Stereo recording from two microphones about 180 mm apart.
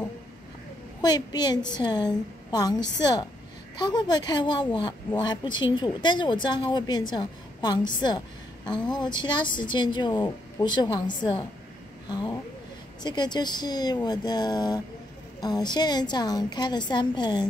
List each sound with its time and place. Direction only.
1.0 s a woman's voice: 25° left (ahead or behind)
8.8 s a woman's voice: 25° left (ahead or behind)